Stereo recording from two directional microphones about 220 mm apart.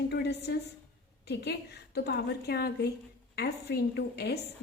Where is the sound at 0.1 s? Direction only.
50° left (ahead or behind).